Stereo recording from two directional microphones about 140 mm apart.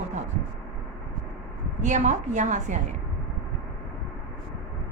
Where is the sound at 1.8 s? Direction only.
60° right (ahead or behind).